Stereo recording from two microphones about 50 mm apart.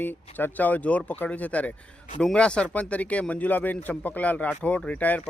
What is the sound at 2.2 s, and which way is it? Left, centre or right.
Speech, left.